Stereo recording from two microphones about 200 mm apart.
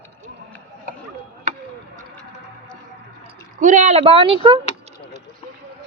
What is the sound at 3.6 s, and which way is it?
Speech, 35° right (ahead or behind).